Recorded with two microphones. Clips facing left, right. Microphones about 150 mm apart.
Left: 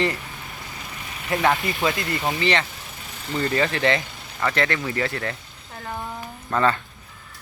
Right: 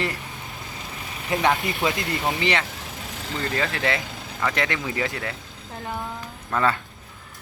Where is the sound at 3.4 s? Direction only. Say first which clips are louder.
Left 4 dB; centre (ahead or behind).